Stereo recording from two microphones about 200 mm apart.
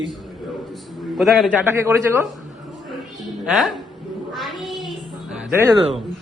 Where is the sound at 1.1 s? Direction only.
Centre (ahead or behind).